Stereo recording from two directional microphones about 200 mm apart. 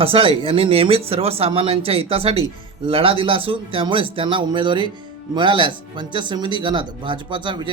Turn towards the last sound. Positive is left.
turn(degrees=-25)  # may be behind; listen again after turning